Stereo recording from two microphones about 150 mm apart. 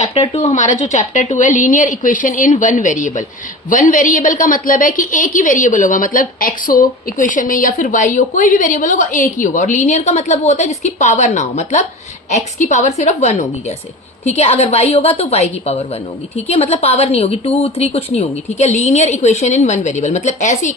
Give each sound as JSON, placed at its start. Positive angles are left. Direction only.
{"t": 0.0, "sound": "a woman's voice", "side_deg": 45}